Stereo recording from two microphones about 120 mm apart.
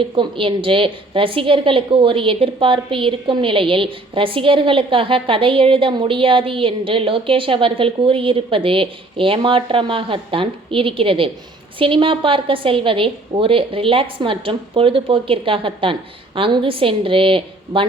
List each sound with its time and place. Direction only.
0.0 s a woman's voice: 45° right (ahead or behind)